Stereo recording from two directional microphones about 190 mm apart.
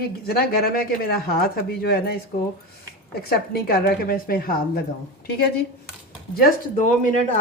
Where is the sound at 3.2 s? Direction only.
55° left (ahead or behind).